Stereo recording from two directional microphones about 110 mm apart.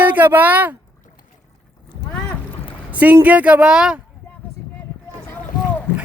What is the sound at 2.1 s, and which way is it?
Boat, 10° left (ahead or behind).